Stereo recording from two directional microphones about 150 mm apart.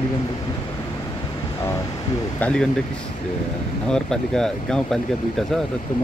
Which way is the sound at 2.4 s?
5° left (ahead or behind).